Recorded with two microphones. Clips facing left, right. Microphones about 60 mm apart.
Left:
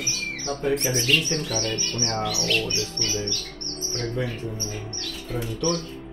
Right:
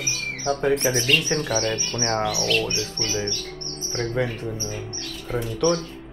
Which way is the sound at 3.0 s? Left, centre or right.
Right.